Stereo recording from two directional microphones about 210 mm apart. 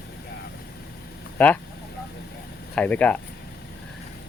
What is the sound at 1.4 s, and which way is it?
Speech, 5° left (ahead or behind).